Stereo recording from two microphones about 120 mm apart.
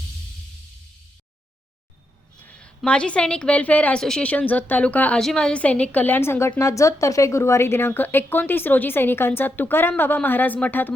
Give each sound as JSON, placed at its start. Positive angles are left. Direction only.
{"t": 2.5, "sound": "a woman's voice", "side_deg": 10}